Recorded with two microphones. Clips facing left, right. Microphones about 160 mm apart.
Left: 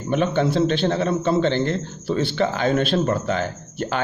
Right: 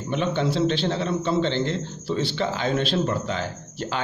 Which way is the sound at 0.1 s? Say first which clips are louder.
Left 4 dB; 50° left (ahead or behind).